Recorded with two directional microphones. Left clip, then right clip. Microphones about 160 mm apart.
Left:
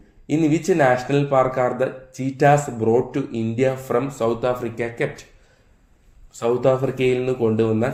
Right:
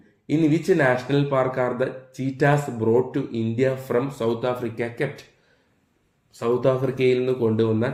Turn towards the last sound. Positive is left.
turn(degrees=15)  # may be behind; listen again after turning